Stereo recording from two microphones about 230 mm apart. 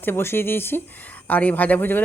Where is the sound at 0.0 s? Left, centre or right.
Centre.